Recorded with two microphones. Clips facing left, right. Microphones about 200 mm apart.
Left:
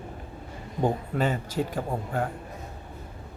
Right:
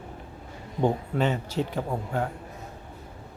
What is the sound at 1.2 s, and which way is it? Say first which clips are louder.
A man's voice: right 1 dB; 50° left (ahead or behind).